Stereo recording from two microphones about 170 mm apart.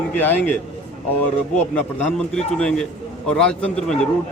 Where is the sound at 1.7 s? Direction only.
5° left (ahead or behind).